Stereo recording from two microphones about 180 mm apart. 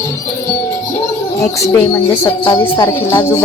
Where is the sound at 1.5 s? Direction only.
15° left (ahead or behind).